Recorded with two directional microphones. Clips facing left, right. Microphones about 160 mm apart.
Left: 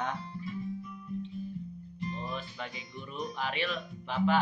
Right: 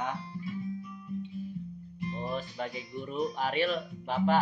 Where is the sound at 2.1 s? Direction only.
40° right (ahead or behind).